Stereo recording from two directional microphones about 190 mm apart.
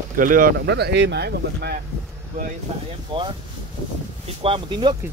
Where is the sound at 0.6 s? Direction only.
60° right (ahead or behind).